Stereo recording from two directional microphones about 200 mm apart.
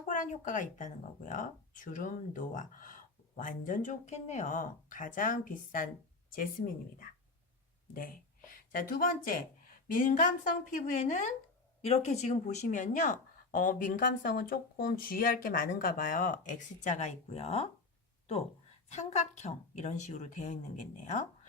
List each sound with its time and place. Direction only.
0.0 s speech: 40° left (ahead or behind)
18.9 s speech: 35° left (ahead or behind)